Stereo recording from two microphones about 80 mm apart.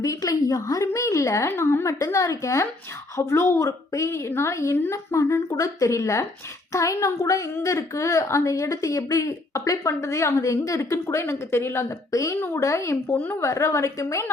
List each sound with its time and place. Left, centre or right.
0.0 s a woman's voice: left